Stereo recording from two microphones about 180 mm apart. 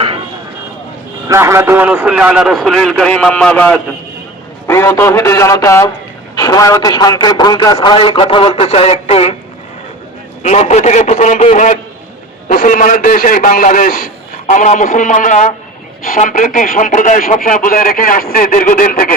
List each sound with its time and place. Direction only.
1.3 s a man's voice: 15° right (ahead or behind); by 9.3 s 35° left (ahead or behind)
10.4 s a man's voice: 40° left (ahead or behind)